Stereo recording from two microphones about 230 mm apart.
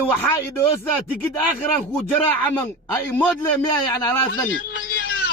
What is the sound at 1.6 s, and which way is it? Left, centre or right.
Speech, centre.